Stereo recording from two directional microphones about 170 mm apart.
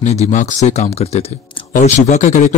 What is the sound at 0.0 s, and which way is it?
Speech, 40° left (ahead or behind).